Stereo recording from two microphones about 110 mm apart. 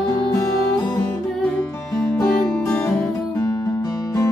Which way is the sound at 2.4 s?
5° left (ahead or behind).